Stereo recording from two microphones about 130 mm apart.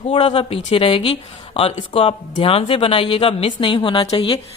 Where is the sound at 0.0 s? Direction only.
45° left (ahead or behind).